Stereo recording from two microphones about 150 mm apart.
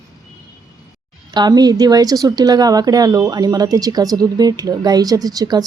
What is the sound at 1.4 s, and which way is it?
Speech, 25° right (ahead or behind).